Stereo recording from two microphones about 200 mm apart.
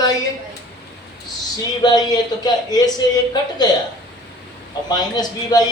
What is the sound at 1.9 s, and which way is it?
A man's voice, 20° left (ahead or behind).